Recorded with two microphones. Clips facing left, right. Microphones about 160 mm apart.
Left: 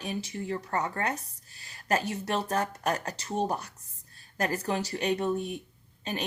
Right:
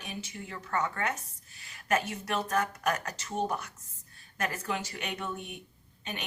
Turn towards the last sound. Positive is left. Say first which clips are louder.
# left 6 dB
turn(degrees=35)  # may be behind; listen again after turning